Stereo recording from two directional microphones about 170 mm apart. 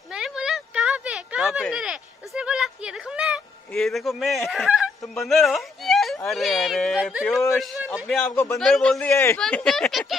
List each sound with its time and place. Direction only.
0.1 s a sound: 5° right (ahead or behind)
3.7 s a man's voice: centre (ahead or behind)
8.2 s speech: 10° left (ahead or behind)
9.1 s speech: 15° left (ahead or behind)
9.4 s speech: 5° left (ahead or behind)